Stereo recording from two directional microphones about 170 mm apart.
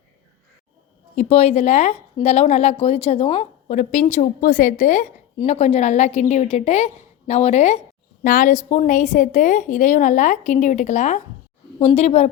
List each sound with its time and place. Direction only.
1.1 s a woman's voice: 40° left (ahead or behind)
4.0 s a woman's voice: 45° left (ahead or behind)
8.2 s a woman's voice: 50° left (ahead or behind)